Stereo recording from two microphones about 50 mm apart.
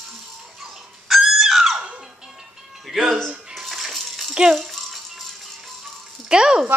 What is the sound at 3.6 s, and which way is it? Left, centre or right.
Rattle, centre.